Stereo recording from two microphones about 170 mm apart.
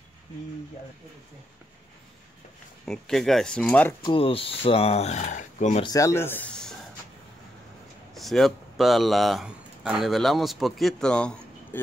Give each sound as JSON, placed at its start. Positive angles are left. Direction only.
{"t": 2.8, "sound": "speech", "side_deg": 0}
{"t": 4.0, "sound": "speech", "side_deg": 30}
{"t": 5.9, "sound": "speech", "side_deg": 20}
{"t": 8.1, "sound": "speech", "side_deg": 0}